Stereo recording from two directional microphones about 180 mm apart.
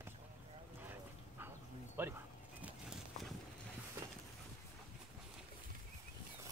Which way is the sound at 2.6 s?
Centre (ahead or behind).